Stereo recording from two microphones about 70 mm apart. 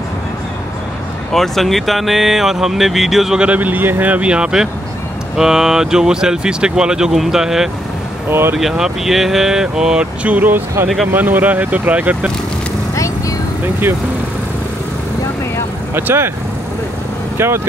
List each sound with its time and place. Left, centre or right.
1.3 s speech: centre
3.4 s speech: right; by 7.7 s centre
8.3 s speech: right
8.5 s speech: centre
15.9 s speech: right